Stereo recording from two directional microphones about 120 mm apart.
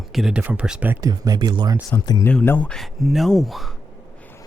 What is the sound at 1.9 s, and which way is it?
Speech, 35° left (ahead or behind).